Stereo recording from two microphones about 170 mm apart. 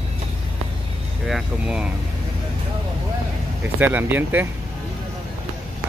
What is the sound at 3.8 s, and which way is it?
Speech, 10° right (ahead or behind).